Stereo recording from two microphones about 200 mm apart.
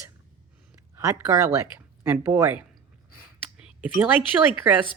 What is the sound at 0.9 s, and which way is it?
Speech, 15° right (ahead or behind).